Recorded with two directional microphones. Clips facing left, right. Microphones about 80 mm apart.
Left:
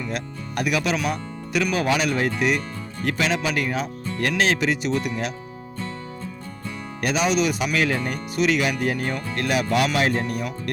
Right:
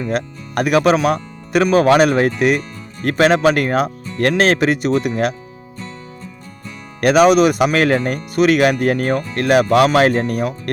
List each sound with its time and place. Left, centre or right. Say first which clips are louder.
0.0 s speech: right 8 dB; right
1.0 s music: right 9 dB; right
1.6 s speech: right 11 dB; right
7.0 s speech: right 11 dB; right